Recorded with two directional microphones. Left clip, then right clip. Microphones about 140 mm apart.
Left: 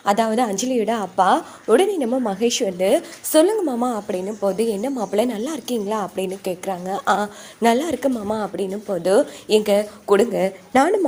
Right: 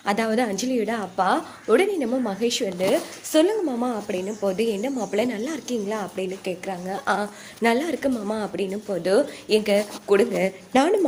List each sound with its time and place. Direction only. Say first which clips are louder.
0.0 s a woman's voice: left 4 dB; 35° left (ahead or behind)
3.8 s a woman's voice: left 3 dB; 30° left (ahead or behind)
6.1 s a woman's voice: left 3 dB; 60° left (ahead or behind); by 8.1 s 40° left (ahead or behind)
8.3 s a woman's voice: left 3 dB; 25° left (ahead or behind)
10.7 s speech: left 3 dB; 10° left (ahead or behind)